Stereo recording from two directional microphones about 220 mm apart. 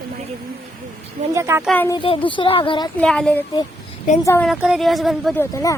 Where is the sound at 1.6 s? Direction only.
5° left (ahead or behind).